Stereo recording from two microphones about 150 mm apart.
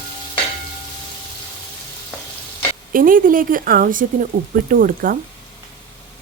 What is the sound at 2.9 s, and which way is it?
Speech, 65° right (ahead or behind).